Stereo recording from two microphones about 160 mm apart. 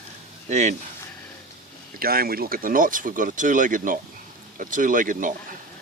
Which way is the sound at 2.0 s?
70° right (ahead or behind).